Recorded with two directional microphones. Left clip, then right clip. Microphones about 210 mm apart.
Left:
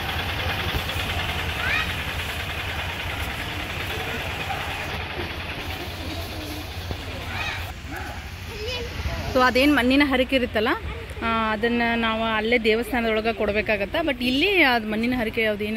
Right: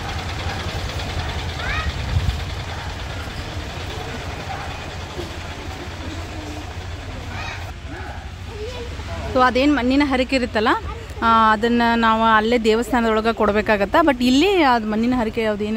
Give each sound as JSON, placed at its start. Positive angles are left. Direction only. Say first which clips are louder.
{"t": 9.3, "sound": "speech", "louder": "right 2 dB", "side_deg": 0}